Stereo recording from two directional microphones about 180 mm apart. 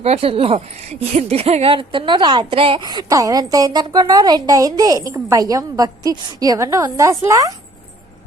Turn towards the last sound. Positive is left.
turn(degrees=-15)  # may be behind; listen again after turning